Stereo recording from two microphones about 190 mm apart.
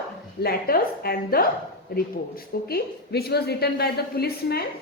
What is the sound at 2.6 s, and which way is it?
A woman's voice, 55° left (ahead or behind).